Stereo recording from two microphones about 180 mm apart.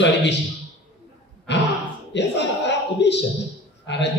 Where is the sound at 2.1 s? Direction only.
75° left (ahead or behind).